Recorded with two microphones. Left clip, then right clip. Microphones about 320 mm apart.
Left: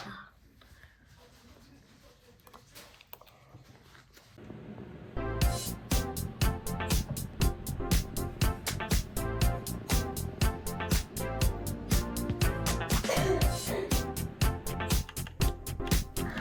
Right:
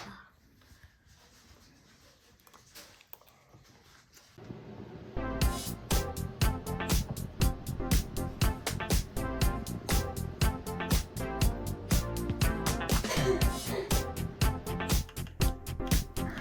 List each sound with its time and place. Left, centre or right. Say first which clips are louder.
5.4 s music: left 1 dB; centre